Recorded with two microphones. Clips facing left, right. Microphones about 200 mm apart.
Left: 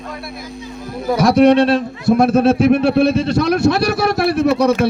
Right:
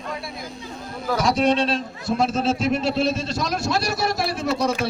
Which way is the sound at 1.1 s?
60° left (ahead or behind).